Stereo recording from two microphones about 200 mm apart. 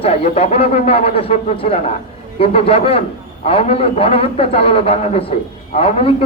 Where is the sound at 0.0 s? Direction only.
30° left (ahead or behind).